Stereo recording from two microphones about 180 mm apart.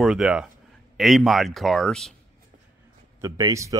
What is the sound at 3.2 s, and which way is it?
Speech, 20° right (ahead or behind).